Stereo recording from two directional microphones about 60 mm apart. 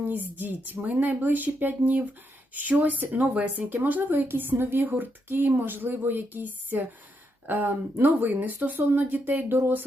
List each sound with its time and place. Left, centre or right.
0.1 s speech: right